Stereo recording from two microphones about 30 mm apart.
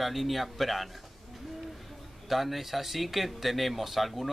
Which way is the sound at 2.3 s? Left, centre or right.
Centre.